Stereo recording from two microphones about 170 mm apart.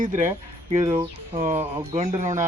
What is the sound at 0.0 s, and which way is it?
Speech, 50° right (ahead or behind).